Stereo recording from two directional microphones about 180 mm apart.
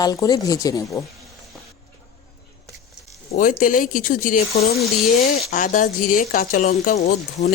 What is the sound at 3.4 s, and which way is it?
Speech, 50° left (ahead or behind).